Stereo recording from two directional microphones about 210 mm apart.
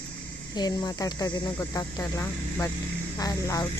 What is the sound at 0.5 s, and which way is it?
Speech, 20° left (ahead or behind).